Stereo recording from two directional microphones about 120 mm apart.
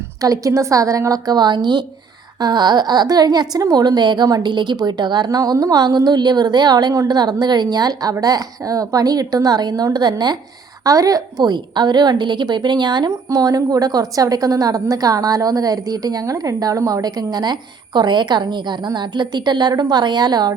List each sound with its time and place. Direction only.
0.2 s a woman's voice: 30° right (ahead or behind)